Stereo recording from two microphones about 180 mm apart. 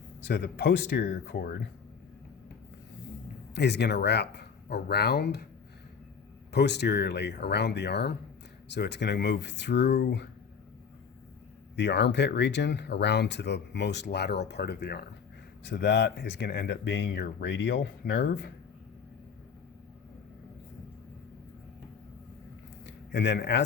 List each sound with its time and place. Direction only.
0.3 s speech: 70° left (ahead or behind)
3.5 s speech: 70° left (ahead or behind)
6.5 s speech: 70° left (ahead or behind)
11.8 s speech: 75° left (ahead or behind)
23.1 s speech: 70° left (ahead or behind)